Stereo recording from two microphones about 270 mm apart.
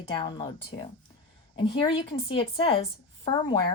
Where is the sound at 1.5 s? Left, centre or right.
Centre.